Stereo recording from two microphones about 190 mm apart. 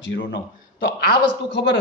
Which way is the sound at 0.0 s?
75° left (ahead or behind).